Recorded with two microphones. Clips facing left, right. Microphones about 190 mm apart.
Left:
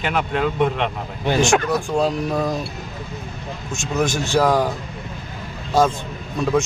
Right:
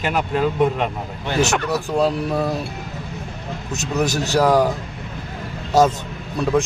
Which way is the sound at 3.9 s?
Centre (ahead or behind).